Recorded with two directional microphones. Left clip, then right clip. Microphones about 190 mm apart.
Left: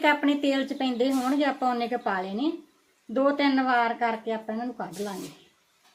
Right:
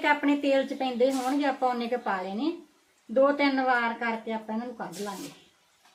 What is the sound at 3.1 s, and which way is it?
A woman's voice, 45° left (ahead or behind).